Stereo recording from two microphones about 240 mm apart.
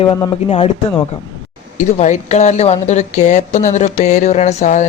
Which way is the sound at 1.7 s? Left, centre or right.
Left.